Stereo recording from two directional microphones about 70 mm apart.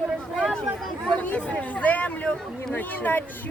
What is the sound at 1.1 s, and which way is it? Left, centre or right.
Speech, centre.